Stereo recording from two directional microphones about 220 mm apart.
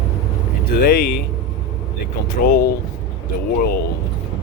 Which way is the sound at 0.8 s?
40° left (ahead or behind).